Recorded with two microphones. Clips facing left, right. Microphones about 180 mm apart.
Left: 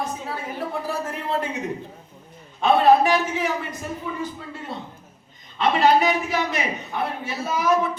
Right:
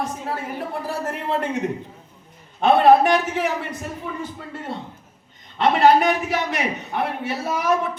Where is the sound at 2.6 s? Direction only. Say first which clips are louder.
Right 2 dB; 60° right (ahead or behind).